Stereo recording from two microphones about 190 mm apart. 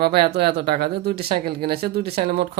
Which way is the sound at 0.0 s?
55° right (ahead or behind).